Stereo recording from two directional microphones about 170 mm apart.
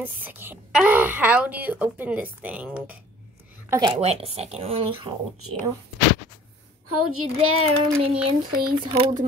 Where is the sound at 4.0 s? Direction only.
35° right (ahead or behind).